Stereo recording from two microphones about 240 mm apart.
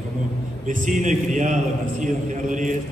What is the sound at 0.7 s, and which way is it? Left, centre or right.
A man's voice, right.